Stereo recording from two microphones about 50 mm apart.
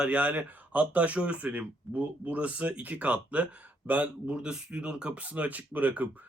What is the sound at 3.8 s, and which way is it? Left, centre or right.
Speech, right.